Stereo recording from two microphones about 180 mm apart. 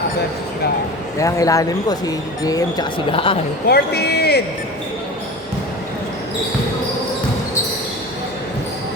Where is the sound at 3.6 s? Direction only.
65° left (ahead or behind).